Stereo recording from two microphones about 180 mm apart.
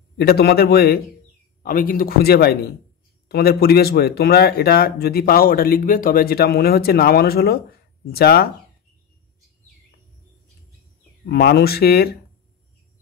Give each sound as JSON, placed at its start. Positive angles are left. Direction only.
{"t": 0.2, "sound": "speech", "side_deg": 60}
{"t": 11.2, "sound": "speech", "side_deg": 60}